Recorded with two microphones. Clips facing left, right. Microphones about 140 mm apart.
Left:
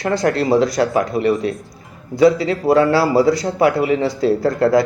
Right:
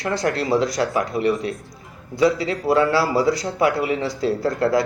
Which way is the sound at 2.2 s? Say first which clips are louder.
Left 5 dB; 30° left (ahead or behind).